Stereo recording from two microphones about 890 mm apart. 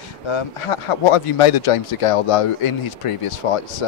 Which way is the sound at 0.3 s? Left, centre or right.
Left.